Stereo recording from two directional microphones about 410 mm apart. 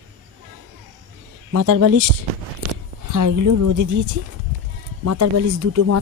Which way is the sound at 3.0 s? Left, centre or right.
Right.